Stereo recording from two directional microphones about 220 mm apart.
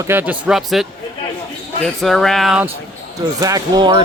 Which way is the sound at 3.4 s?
15° right (ahead or behind).